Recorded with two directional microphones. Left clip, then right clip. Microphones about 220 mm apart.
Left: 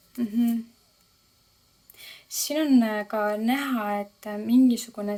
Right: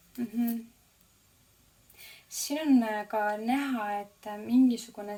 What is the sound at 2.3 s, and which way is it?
Speech, 45° left (ahead or behind).